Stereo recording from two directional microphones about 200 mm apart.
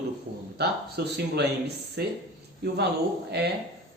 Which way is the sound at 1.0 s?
55° right (ahead or behind).